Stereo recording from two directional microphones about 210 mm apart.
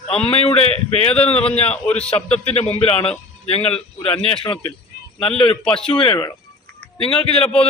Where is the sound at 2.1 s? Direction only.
30° left (ahead or behind).